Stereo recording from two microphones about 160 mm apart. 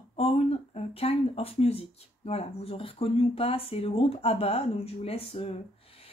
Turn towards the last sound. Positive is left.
turn(degrees=40)  # may be behind; listen again after turning